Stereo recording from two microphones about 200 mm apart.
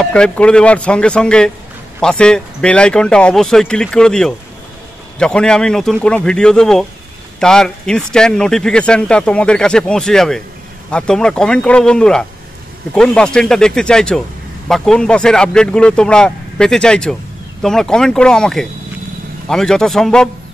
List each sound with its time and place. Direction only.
0.0 s speech: 5° left (ahead or behind)